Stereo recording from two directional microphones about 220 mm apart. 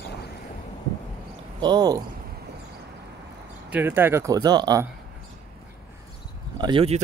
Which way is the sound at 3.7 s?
10° right (ahead or behind).